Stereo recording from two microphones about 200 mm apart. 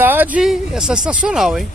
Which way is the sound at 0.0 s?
10° right (ahead or behind).